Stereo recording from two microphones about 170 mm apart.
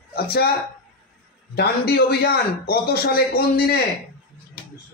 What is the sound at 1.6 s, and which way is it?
Speech, 65° left (ahead or behind).